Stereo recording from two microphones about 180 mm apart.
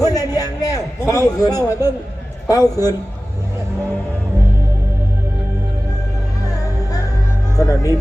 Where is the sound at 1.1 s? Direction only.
20° left (ahead or behind).